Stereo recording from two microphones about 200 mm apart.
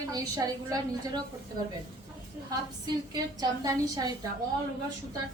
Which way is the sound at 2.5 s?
20° right (ahead or behind).